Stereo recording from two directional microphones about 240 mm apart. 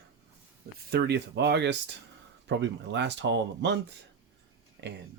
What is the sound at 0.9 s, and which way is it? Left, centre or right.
Speech, right.